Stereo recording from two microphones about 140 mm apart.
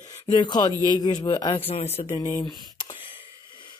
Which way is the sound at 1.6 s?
50° left (ahead or behind).